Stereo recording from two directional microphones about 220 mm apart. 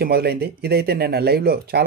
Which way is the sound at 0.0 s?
45° right (ahead or behind).